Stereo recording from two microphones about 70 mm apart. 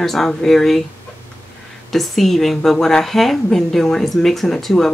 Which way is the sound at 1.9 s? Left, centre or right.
Centre.